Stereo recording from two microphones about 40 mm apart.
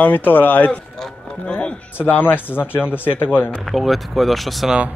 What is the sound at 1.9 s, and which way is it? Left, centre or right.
Speech, left.